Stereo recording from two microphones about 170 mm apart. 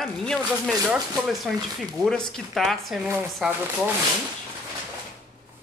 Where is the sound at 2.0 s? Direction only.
5° left (ahead or behind).